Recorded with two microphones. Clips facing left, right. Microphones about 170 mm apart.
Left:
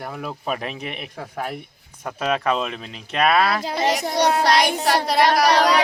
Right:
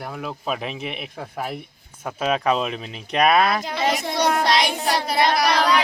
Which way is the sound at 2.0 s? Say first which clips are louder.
Right 1 dB; 5° right (ahead or behind).